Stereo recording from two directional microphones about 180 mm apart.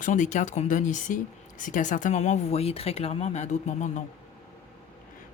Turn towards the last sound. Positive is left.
turn(degrees=40)  # may be behind; listen again after turning